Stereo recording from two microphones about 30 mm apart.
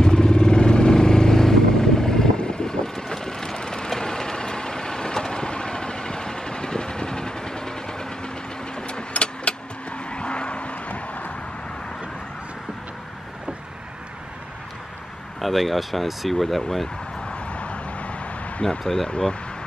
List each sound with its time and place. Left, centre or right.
0.0 s vehicle: left
8.7 s vehicle: left
15.4 s speech: centre
17.3 s vehicle: left
18.6 s speech: centre